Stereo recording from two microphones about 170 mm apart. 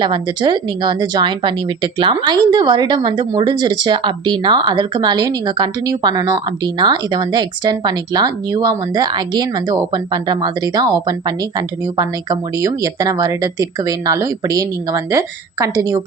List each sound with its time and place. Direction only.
0.0 s speech: 25° right (ahead or behind)